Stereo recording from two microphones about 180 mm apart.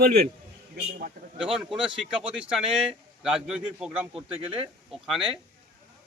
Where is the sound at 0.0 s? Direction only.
60° right (ahead or behind).